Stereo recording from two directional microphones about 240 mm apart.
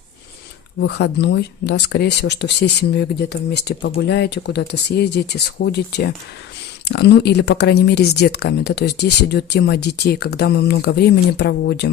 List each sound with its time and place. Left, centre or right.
0.8 s speech: left